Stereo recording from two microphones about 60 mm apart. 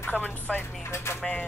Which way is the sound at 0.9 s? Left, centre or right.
Left.